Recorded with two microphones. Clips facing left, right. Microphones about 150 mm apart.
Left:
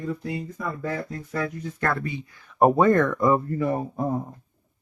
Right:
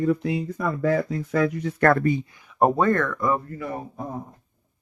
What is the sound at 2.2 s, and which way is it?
Speech, 20° right (ahead or behind).